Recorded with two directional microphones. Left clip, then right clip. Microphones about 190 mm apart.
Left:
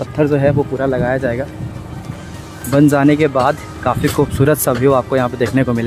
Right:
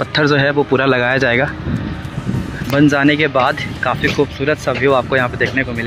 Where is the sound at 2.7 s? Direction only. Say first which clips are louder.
Left 1 dB; 15° left (ahead or behind).